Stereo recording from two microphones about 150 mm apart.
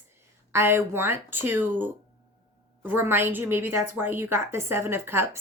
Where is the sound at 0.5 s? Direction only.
15° right (ahead or behind).